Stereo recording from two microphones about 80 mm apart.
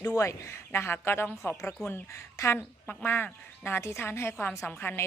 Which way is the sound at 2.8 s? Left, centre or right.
Left.